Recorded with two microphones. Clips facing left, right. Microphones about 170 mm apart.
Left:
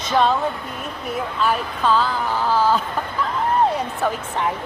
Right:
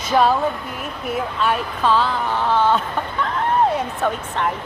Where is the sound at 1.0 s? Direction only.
Centre (ahead or behind).